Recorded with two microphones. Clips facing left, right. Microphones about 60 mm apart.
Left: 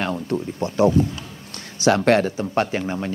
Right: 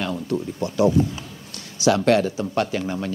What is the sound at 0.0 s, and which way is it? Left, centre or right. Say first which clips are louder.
A man's voice: left 1 dB; left.